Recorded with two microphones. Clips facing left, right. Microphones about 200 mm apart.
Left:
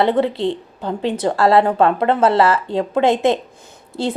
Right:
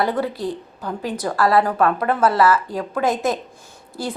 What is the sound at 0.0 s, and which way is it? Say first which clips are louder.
A woman's voice: left 5 dB; 25° left (ahead or behind).